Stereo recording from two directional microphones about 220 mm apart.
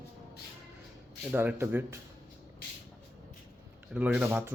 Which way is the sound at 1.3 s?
10° right (ahead or behind).